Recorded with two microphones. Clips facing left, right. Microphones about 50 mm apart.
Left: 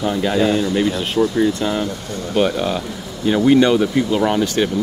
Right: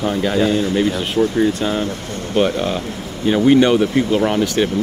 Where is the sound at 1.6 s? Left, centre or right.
Centre.